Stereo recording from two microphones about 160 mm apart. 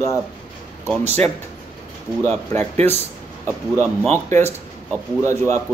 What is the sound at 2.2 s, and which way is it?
Speech, 15° left (ahead or behind).